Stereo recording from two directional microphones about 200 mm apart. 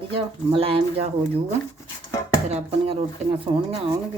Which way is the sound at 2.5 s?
30° right (ahead or behind).